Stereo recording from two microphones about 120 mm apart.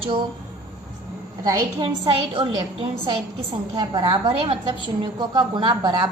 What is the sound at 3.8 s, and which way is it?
Speech, 35° right (ahead or behind).